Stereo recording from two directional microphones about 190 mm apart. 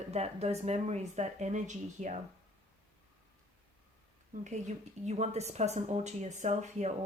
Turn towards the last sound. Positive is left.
turn(degrees=-35)  # may be behind; listen again after turning